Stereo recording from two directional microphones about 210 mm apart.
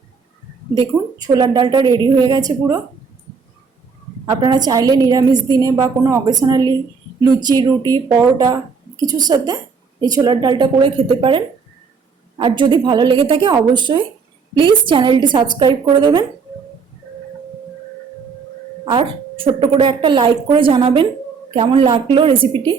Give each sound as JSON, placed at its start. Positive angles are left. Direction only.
{"t": 0.7, "sound": "a woman's voice", "side_deg": -20}
{"t": 4.4, "sound": "a woman's voice", "side_deg": -20}
{"t": 18.9, "sound": "a woman's voice", "side_deg": -25}